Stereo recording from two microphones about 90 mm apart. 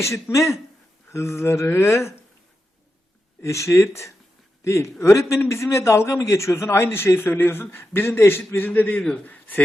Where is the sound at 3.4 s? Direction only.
35° left (ahead or behind).